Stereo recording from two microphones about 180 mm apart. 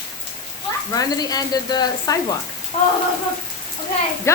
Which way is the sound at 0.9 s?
20° left (ahead or behind).